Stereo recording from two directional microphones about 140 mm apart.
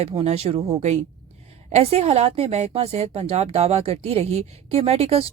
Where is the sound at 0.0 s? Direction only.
45° right (ahead or behind).